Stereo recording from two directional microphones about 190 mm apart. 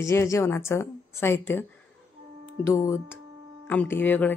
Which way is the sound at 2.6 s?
15° left (ahead or behind).